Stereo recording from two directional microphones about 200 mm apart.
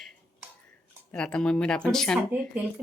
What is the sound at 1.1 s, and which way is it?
A woman's voice, 5° left (ahead or behind).